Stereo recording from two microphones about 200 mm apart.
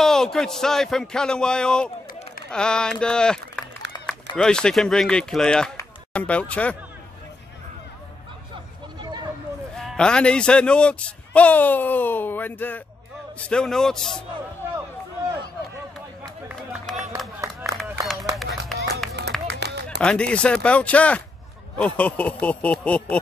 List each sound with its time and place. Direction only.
0.0 s speech: centre (ahead or behind)
9.0 s a sound: 20° right (ahead or behind)
9.8 s a man's voice: 5° left (ahead or behind)
16.2 s run: 5° right (ahead or behind)
17.4 s a sound: 15° right (ahead or behind)
18.0 s run: centre (ahead or behind)
19.2 s music: 55° right (ahead or behind)
20.0 s a man's voice: 5° left (ahead or behind)